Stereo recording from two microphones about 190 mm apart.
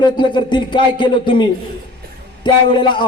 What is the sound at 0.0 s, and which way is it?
A man's voice, 25° left (ahead or behind).